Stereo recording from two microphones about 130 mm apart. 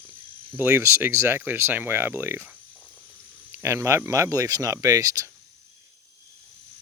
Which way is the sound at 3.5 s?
20° right (ahead or behind).